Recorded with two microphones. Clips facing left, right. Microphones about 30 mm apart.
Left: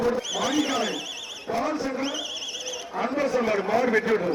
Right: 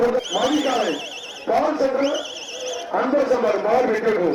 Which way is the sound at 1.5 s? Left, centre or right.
Right.